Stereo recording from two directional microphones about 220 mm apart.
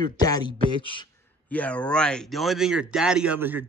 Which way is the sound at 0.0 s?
20° left (ahead or behind).